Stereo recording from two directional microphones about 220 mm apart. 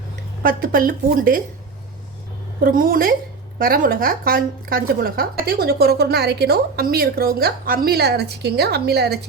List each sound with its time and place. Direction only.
0.4 s a woman's voice: 40° right (ahead or behind)
2.6 s a woman's voice: 40° right (ahead or behind)